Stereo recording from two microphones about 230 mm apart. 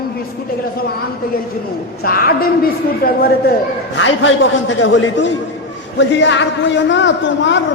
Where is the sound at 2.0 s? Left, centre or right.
Left.